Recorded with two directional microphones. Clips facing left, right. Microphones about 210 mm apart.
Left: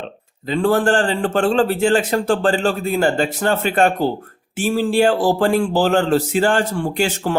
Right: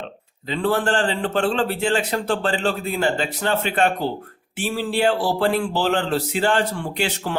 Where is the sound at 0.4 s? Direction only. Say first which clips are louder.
Left 5 dB; 45° left (ahead or behind).